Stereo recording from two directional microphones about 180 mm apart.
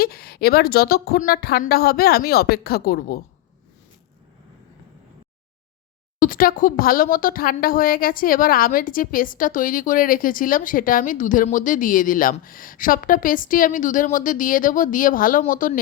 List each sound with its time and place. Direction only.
0.0 s a woman's voice: 60° left (ahead or behind)
6.1 s speech: 50° left (ahead or behind)